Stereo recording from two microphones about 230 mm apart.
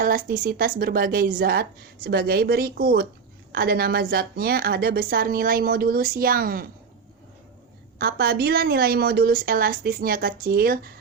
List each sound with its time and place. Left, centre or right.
0.0 s a woman's voice: right
7.9 s a woman's voice: right